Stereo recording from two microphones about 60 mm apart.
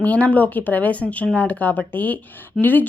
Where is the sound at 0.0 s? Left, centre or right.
Left.